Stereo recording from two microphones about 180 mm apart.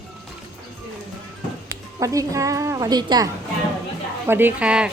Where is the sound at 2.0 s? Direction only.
20° right (ahead or behind).